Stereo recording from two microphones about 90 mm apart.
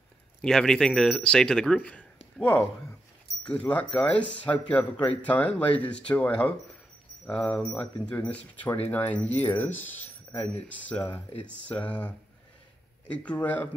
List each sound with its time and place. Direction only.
0.4 s speech: 5° left (ahead or behind)
13.1 s speech: 15° left (ahead or behind)